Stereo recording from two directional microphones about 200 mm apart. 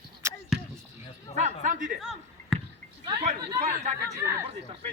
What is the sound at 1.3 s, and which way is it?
Speech, 40° right (ahead or behind).